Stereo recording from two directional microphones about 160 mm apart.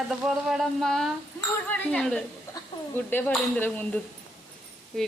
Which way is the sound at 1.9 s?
5° left (ahead or behind).